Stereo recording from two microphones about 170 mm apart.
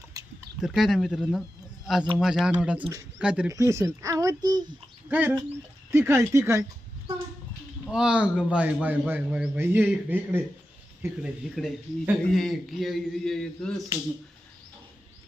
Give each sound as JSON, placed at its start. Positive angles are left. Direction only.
{"t": 0.1, "sound": "a sound", "side_deg": -20}
{"t": 0.6, "sound": "a man's voice", "side_deg": 0}
{"t": 3.5, "sound": "speech", "side_deg": -20}
{"t": 5.0, "sound": "a man's voice", "side_deg": -10}
{"t": 7.9, "sound": "a man's voice", "side_deg": -5}